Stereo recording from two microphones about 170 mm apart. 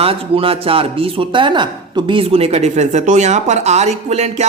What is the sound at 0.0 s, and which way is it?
Speech, 35° right (ahead or behind).